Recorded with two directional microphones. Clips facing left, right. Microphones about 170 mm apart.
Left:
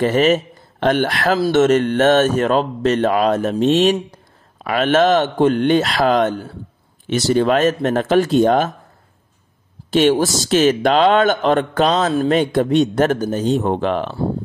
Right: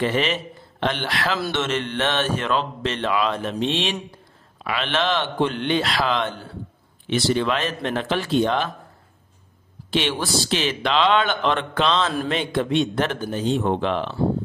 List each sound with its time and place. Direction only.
0.0 s speech: 45° left (ahead or behind)
9.8 s speech: 45° left (ahead or behind)